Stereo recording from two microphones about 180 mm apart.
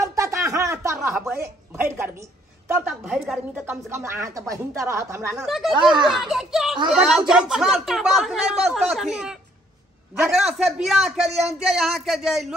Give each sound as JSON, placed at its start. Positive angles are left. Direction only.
{"t": 0.0, "sound": "a sound", "side_deg": -15}
{"t": 1.3, "sound": "a woman's voice", "side_deg": -15}
{"t": 5.3, "sound": "speech", "side_deg": 0}